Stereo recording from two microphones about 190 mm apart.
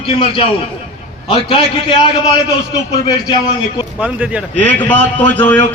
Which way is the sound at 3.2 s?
25° left (ahead or behind).